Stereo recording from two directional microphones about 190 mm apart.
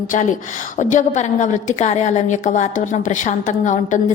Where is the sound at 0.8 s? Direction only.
40° left (ahead or behind).